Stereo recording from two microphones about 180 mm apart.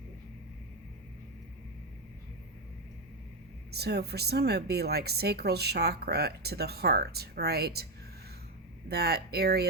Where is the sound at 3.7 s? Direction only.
65° right (ahead or behind).